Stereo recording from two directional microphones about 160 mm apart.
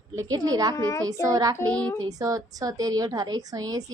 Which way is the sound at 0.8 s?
20° left (ahead or behind).